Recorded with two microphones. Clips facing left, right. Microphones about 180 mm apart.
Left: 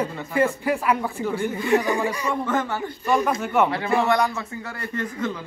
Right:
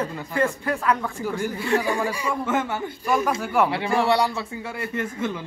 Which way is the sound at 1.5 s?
15° left (ahead or behind).